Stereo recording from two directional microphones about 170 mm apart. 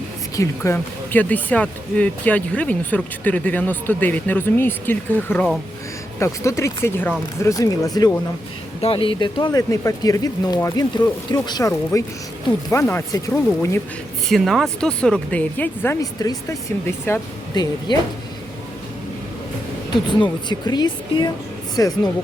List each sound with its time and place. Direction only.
0.3 s speech: 15° left (ahead or behind)
8.8 s speech: 30° left (ahead or behind); by 13.7 s 15° left (ahead or behind)
14.3 s speech: centre (ahead or behind); by 17.9 s 25° left (ahead or behind)
19.9 s speech: 25° left (ahead or behind)